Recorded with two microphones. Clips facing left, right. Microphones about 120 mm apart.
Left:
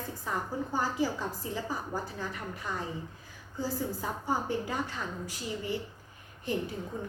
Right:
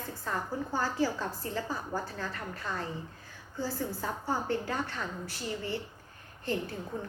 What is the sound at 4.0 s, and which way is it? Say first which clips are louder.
A woman's voice: left 1 dB; 15° left (ahead or behind).